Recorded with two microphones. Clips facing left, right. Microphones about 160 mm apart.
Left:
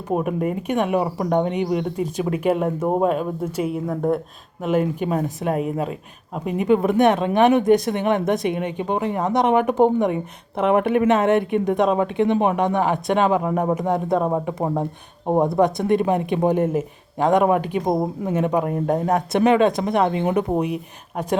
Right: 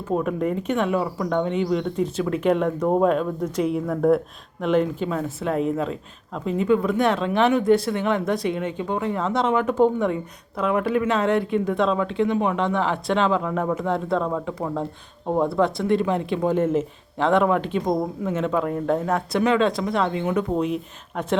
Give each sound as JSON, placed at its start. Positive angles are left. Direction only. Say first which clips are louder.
{"t": 0.1, "sound": "speech", "louder": "left 1 dB", "side_deg": 15}
{"t": 1.0, "sound": "speech", "louder": "left 3 dB", "side_deg": 25}
{"t": 15.3, "sound": "speech", "louder": "left 3 dB", "side_deg": 20}